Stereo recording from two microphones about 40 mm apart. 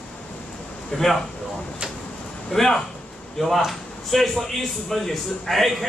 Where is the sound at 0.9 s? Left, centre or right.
Centre.